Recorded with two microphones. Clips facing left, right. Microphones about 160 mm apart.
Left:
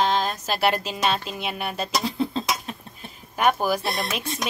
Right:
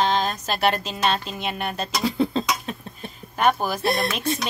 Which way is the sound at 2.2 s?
80° right.